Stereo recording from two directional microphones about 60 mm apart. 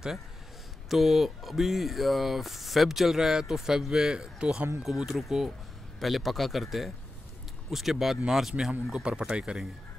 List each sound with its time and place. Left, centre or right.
0.8 s speech: centre
4.8 s speech: centre
8.9 s speech: centre